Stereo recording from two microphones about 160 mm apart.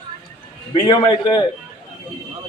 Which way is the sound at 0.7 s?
30° left (ahead or behind).